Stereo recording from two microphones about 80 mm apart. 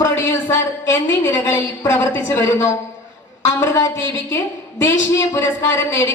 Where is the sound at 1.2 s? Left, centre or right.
Left.